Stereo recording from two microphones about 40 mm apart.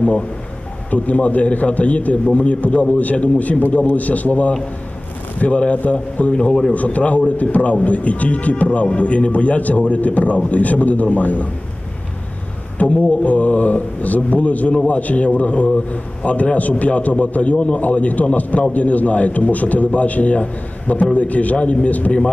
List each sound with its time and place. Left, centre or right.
0.8 s a man's voice: left
6.3 s a man's voice: centre
6.7 s a man's voice: left
12.9 s a man's voice: left